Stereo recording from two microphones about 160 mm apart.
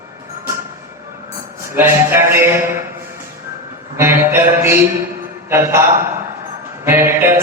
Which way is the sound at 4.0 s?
15° right (ahead or behind).